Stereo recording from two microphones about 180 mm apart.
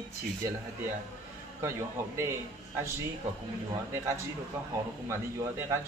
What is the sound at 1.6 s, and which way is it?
Speech, 15° right (ahead or behind).